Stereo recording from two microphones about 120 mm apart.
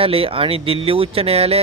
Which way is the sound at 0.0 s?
50° right (ahead or behind).